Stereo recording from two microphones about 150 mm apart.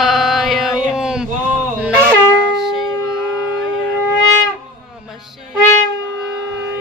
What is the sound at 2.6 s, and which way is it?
Music, centre (ahead or behind).